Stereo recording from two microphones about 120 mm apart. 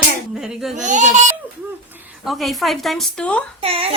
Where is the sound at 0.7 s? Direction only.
90° right.